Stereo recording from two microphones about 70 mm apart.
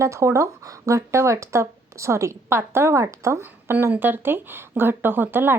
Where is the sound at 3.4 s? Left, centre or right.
Right.